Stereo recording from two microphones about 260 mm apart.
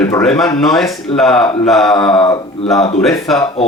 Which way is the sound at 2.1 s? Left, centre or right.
Centre.